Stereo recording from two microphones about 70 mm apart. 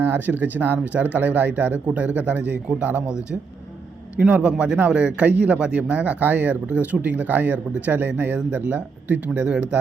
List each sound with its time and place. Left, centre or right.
0.0 s speech: right
4.2 s speech: centre